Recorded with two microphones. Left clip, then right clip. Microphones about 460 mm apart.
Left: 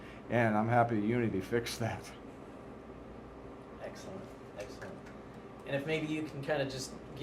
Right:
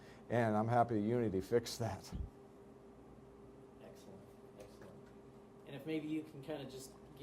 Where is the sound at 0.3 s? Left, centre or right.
Right.